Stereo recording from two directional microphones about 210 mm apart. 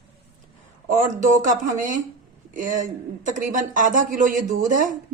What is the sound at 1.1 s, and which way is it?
Speech, 35° right (ahead or behind).